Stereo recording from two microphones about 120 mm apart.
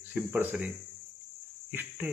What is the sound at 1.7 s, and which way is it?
Speech, 15° right (ahead or behind).